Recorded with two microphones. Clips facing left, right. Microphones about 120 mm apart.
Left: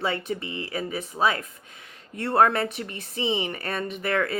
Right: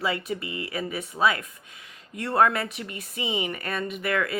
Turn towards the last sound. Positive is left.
turn(degrees=30)  # may be behind; listen again after turning